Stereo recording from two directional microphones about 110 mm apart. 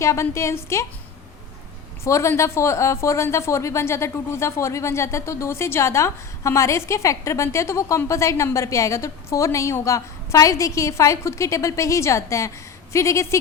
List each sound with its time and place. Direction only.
0.0 s speech: 25° left (ahead or behind)
2.0 s speech: 25° left (ahead or behind)